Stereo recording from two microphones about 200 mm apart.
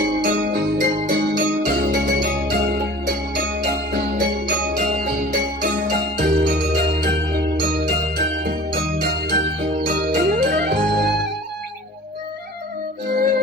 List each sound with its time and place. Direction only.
0.3 s music: 45° right (ahead or behind)
8.4 s music: 50° right (ahead or behind)
13.1 s music: 50° right (ahead or behind)